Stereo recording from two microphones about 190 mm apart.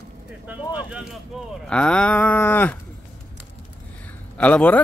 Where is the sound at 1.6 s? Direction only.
5° left (ahead or behind).